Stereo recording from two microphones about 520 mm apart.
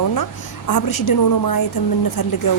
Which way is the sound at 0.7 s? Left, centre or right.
Left.